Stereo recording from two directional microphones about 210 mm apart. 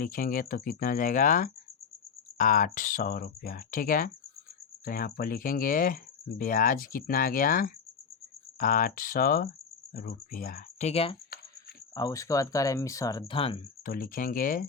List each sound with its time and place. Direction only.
0.0 s speech: 40° left (ahead or behind)
11.9 s speech: 15° left (ahead or behind)
13.8 s speech: 45° left (ahead or behind)